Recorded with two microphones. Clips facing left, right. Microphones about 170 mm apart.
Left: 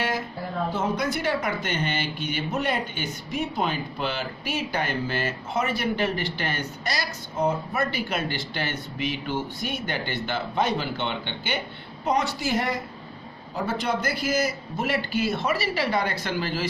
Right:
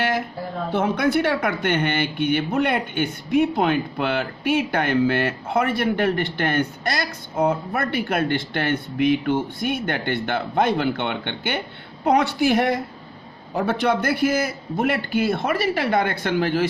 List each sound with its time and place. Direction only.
0.7 s speech: 65° right (ahead or behind)